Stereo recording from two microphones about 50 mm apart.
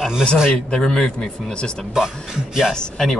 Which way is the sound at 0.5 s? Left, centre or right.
Centre.